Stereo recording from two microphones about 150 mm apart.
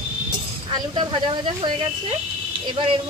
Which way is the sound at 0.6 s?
35° right (ahead or behind).